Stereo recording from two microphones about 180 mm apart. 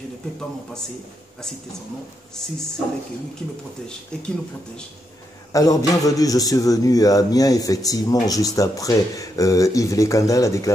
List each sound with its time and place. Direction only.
4.1 s speech: 5° left (ahead or behind)
5.5 s a man's voice: 20° left (ahead or behind)